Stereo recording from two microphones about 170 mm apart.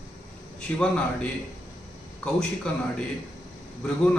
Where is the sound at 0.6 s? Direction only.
5° left (ahead or behind).